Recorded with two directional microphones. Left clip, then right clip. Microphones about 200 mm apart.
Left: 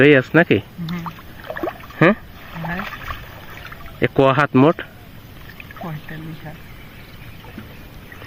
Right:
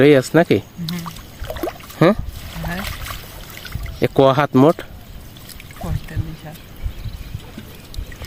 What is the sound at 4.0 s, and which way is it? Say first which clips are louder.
Speech: right 1 dB; 15° right (ahead or behind).